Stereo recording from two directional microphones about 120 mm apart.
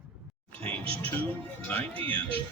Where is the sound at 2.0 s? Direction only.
50° right (ahead or behind).